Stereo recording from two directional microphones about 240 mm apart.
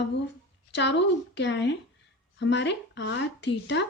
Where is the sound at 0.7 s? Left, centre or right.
Left.